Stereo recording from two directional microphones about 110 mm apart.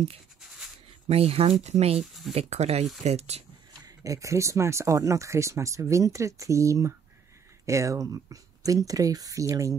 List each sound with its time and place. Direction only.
1.0 s speech: 65° right (ahead or behind)
3.8 s speech: 30° right (ahead or behind)